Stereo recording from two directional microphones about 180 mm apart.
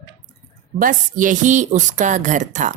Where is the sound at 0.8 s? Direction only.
45° right (ahead or behind).